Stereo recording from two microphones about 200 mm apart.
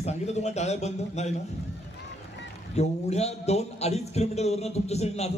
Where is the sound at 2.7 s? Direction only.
35° left (ahead or behind).